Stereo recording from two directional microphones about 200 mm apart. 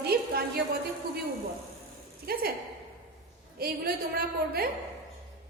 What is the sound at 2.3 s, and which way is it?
Speech, 50° right (ahead or behind).